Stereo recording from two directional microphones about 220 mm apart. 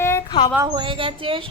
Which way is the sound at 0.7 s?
25° right (ahead or behind).